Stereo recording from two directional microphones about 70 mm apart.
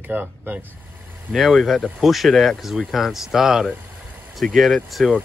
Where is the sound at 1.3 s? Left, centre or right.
Centre.